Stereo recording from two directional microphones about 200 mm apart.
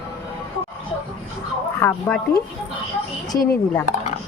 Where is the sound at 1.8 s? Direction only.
10° left (ahead or behind).